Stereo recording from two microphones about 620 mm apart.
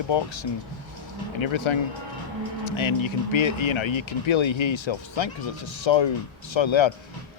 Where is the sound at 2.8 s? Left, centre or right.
Left.